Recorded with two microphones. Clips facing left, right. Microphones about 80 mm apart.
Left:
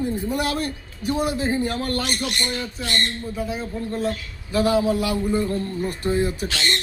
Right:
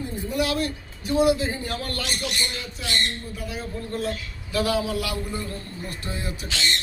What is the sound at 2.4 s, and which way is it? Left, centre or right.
Speech, left.